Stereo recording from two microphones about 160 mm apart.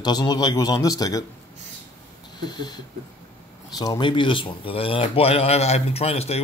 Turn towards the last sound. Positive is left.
turn(degrees=40)  # may be behind; listen again after turning